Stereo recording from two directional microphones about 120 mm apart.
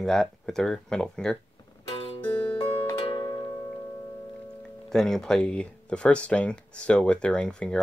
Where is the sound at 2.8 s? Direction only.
35° left (ahead or behind).